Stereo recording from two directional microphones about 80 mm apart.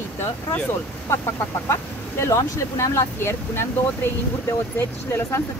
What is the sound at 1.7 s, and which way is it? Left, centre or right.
Speech, left.